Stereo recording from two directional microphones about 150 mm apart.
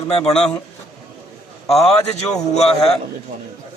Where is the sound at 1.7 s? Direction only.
45° left (ahead or behind).